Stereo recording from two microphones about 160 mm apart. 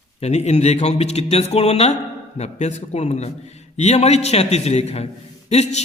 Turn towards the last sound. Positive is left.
turn(degrees=45)  # may be behind; listen again after turning